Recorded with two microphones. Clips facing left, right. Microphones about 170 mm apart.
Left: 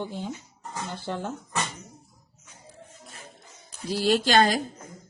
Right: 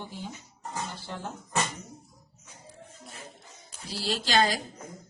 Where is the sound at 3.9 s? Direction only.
60° left (ahead or behind).